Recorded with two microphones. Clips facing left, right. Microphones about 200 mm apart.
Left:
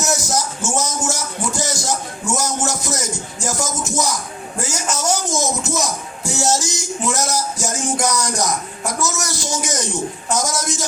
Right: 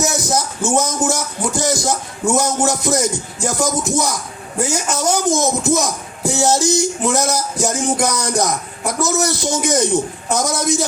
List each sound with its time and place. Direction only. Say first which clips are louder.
0.0 s music: right 2 dB; 60° right (ahead or behind)
2.2 s speech: right 6 dB; 60° right (ahead or behind)